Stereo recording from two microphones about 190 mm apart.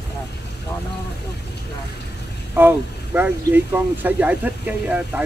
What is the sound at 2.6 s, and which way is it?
Speech, 10° right (ahead or behind).